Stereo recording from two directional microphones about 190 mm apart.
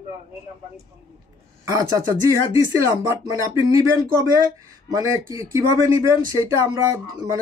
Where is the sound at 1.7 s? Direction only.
15° right (ahead or behind).